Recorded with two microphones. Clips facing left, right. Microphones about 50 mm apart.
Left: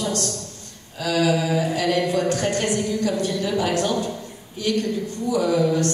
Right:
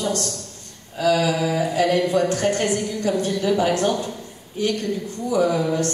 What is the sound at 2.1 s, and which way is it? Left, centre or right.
A man's voice, right.